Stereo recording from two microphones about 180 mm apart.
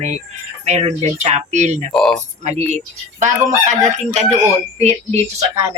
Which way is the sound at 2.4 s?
40° right (ahead or behind).